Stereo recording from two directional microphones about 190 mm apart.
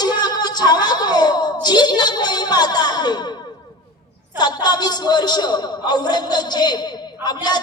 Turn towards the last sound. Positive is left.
turn(degrees=20)  # may be behind; listen again after turning